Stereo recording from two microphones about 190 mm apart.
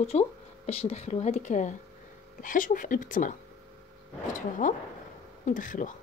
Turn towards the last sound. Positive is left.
turn(degrees=45)  # may be behind; listen again after turning